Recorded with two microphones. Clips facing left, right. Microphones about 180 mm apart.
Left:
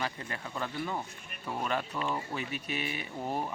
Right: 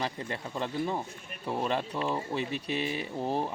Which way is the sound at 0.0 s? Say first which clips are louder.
Right 3 dB; 30° right (ahead or behind).